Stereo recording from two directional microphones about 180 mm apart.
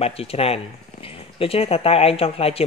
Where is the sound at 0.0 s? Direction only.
35° left (ahead or behind).